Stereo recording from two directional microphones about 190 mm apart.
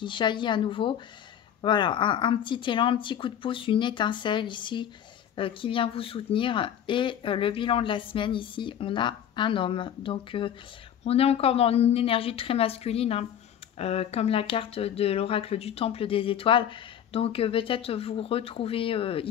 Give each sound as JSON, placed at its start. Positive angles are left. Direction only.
{"t": 0.0, "sound": "a woman's voice", "side_deg": 25}